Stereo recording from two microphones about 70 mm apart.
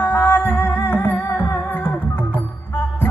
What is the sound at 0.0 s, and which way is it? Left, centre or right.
Music, left.